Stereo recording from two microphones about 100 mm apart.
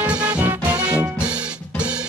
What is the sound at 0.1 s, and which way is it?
Music, 15° right (ahead or behind).